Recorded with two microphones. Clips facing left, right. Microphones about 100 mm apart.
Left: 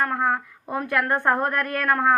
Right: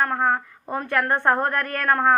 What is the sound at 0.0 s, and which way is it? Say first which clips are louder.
A woman's voice: right 1 dB; 5° left (ahead or behind).